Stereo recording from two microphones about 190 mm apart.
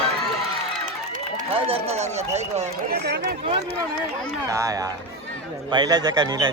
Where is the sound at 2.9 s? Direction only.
55° right (ahead or behind).